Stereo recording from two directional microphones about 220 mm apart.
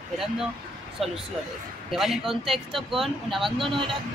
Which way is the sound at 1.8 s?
Centre (ahead or behind).